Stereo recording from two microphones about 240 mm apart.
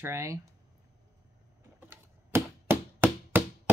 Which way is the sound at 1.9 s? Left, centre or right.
Centre.